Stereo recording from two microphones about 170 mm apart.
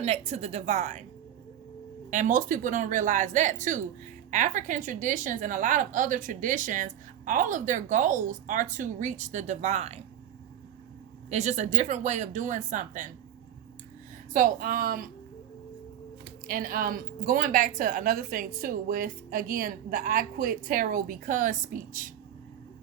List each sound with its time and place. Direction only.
0.0 s a woman's voice: 40° right (ahead or behind)
2.0 s a woman's voice: 50° right (ahead or behind)
11.3 s a woman's voice: 40° right (ahead or behind)
14.3 s a woman's voice: 55° right (ahead or behind)
16.5 s a woman's voice: 55° right (ahead or behind)